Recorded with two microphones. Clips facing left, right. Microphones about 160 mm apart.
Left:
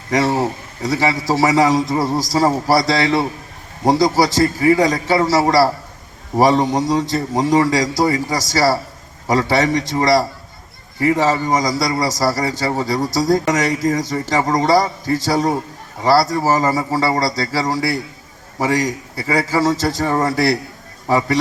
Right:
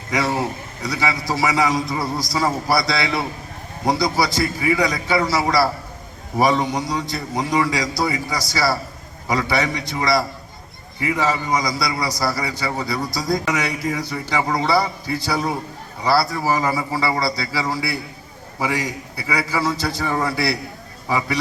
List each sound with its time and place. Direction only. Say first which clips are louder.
0.1 s a man's voice: left 5 dB; 35° left (ahead or behind)